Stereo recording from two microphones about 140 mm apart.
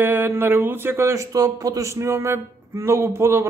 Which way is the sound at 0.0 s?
15° right (ahead or behind).